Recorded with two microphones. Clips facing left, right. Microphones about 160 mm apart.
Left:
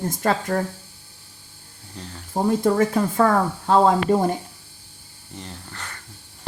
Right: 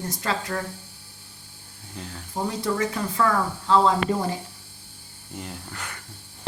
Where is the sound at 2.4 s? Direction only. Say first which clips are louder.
Left 7 dB; 50° left (ahead or behind).